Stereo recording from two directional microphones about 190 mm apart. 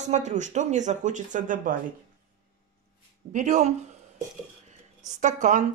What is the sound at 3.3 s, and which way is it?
Speech, 40° right (ahead or behind).